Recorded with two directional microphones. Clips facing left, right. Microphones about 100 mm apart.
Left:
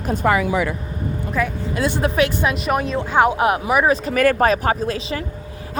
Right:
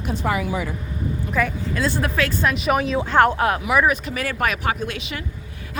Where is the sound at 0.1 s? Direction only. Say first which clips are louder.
Left 6 dB; 50° left (ahead or behind).